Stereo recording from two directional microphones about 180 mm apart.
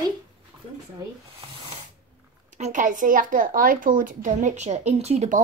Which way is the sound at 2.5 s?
45° right (ahead or behind).